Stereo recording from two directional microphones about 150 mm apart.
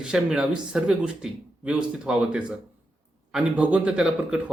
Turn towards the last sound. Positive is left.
turn(degrees=-5)  # may be behind; listen again after turning